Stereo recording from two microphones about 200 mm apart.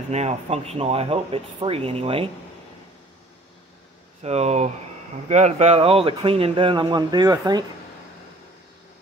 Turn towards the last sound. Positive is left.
turn(degrees=-20)  # may be behind; listen again after turning